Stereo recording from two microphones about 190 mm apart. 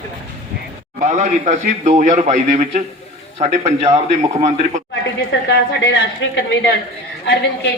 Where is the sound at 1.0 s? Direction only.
40° right (ahead or behind).